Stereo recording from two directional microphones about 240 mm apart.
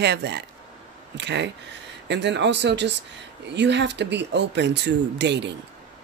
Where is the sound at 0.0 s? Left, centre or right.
Right.